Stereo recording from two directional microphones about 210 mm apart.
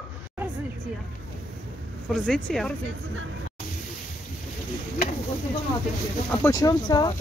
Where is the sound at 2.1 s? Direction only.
5° left (ahead or behind).